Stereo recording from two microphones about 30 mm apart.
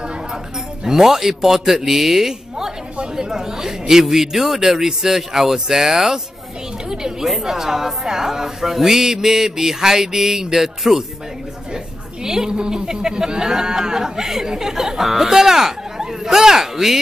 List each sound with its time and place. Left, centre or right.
0.8 s a woman's voice: centre